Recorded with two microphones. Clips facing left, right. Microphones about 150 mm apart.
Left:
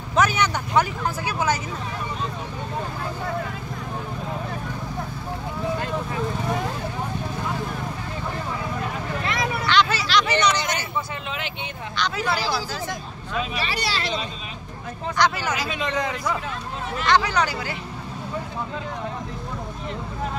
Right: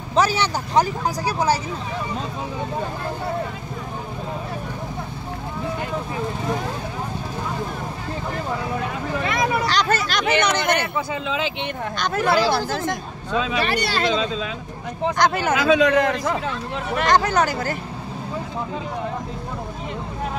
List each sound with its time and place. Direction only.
0.1 s speech: 30° right (ahead or behind)
9.7 s speech: 45° right (ahead or behind)
12.0 s speech: 50° right (ahead or behind)
15.1 s speech: 50° right (ahead or behind)
15.7 s a man's voice: 70° right (ahead or behind)
17.0 s speech: 45° right (ahead or behind)